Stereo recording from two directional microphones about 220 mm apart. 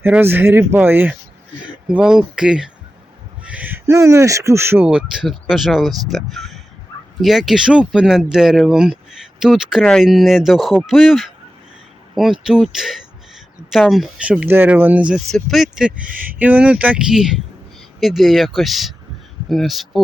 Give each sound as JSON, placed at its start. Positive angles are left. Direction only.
{"t": 0.0, "sound": "speech", "side_deg": -10}
{"t": 16.0, "sound": "speech", "side_deg": -40}
{"t": 16.4, "sound": "speech", "side_deg": -5}